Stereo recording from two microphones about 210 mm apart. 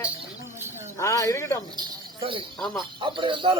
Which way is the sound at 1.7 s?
20° right (ahead or behind).